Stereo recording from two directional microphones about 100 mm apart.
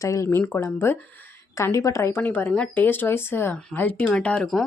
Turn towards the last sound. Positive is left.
turn(degrees=5)  # may be behind; listen again after turning